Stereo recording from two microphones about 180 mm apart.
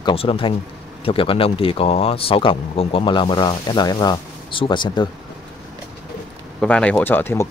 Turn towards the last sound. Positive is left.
turn(degrees=10)  # may be behind; listen again after turning